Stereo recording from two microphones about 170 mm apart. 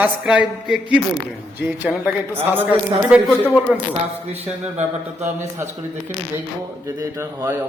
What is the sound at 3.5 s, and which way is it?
Speech, 10° left (ahead or behind).